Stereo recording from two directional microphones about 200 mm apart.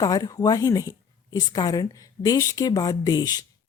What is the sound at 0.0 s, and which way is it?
A woman's voice, 20° left (ahead or behind).